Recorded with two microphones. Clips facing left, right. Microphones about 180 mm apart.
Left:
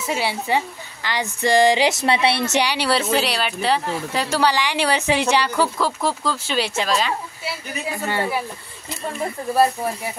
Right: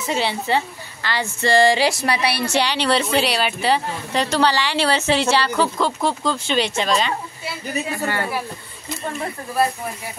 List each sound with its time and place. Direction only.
0.0 s a woman's voice: 10° left (ahead or behind)
5.6 s speech: 5° left (ahead or behind)
8.1 s a woman's voice: 25° left (ahead or behind)